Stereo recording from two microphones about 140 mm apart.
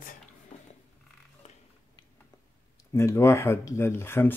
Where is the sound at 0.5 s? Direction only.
55° left (ahead or behind).